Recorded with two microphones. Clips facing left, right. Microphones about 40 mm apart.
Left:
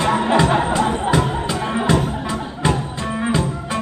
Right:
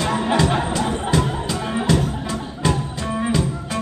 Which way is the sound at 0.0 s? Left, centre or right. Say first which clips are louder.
Left 3 dB; centre.